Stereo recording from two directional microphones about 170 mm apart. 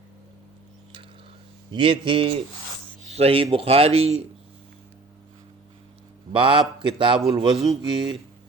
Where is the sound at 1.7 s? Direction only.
30° right (ahead or behind).